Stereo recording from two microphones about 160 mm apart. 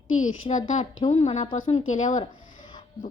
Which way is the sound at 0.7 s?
45° left (ahead or behind).